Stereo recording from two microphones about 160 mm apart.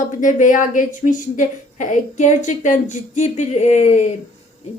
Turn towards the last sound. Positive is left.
turn(degrees=45)  # may be behind; listen again after turning